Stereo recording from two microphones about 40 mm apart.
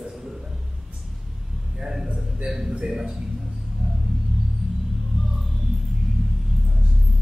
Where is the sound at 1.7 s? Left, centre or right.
Centre.